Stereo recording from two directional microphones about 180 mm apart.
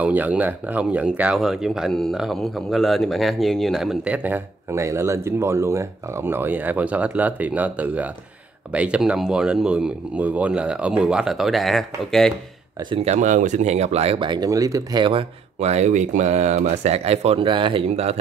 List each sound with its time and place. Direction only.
0.0 s speech: 10° right (ahead or behind)
12.9 s speech: 35° right (ahead or behind)